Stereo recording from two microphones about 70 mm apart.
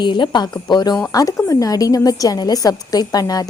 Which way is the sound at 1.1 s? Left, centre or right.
Left.